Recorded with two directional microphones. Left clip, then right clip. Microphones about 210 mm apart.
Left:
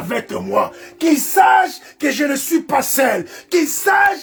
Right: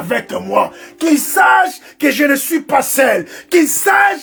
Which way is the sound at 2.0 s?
10° right (ahead or behind).